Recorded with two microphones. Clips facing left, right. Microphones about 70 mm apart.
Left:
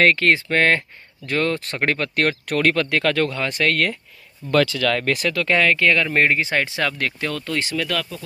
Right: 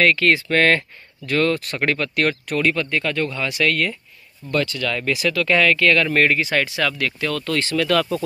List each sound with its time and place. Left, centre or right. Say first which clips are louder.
0.0 s speech: even; left
3.3 s speech: even; left
4.5 s speech: left 4 dB; left
5.0 s speech: even; left
5.3 s speech: right 2 dB; left